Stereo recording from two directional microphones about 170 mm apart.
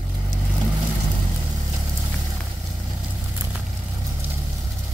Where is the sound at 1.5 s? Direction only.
20° right (ahead or behind).